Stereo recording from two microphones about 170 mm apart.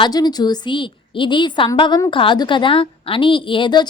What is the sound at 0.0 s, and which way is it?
A woman's voice, 25° left (ahead or behind).